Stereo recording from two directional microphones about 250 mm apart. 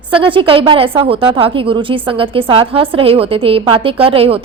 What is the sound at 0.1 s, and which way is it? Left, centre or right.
A woman's voice, right.